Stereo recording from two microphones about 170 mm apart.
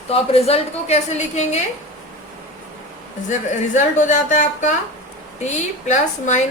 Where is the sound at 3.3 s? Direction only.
45° left (ahead or behind).